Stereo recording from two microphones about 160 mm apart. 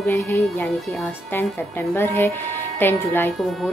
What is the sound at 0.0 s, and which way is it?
Speech, 15° left (ahead or behind).